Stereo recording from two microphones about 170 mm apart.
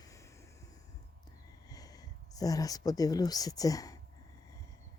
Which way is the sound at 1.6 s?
20° left (ahead or behind).